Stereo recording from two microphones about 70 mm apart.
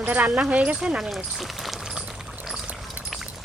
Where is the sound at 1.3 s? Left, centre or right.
Centre.